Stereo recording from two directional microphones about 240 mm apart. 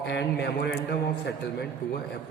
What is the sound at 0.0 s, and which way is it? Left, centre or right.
Speech, left.